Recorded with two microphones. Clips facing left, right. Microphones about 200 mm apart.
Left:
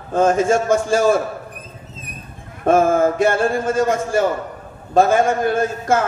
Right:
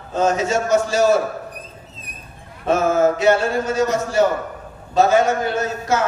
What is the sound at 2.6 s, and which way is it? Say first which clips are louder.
A man's voice: left 2 dB; 50° left (ahead or behind).